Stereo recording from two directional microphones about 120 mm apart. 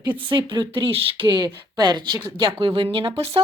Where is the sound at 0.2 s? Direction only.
45° right (ahead or behind).